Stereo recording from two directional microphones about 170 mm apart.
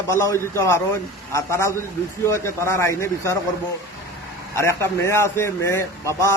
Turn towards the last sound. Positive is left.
turn(degrees=15)  # may be behind; listen again after turning